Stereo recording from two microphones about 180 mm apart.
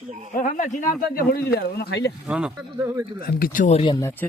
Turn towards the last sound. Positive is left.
turn(degrees=15)  # may be behind; listen again after turning